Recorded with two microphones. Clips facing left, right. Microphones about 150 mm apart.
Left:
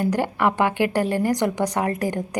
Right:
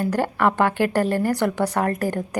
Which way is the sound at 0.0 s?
15° left (ahead or behind).